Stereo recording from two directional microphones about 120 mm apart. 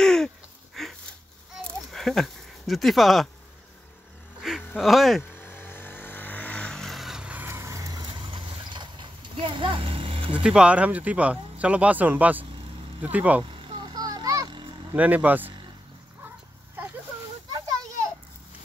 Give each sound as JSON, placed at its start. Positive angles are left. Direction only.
{"t": 0.0, "sound": "a sound", "side_deg": 5}
{"t": 1.9, "sound": "speech", "side_deg": 0}
{"t": 4.4, "sound": "a sound", "side_deg": 0}
{"t": 5.3, "sound": "vehicle", "side_deg": 15}
{"t": 8.1, "sound": "horse", "side_deg": -45}
{"t": 10.4, "sound": "speech", "side_deg": -10}
{"t": 13.4, "sound": "vehicle", "side_deg": -40}
{"t": 15.0, "sound": "speech", "side_deg": -15}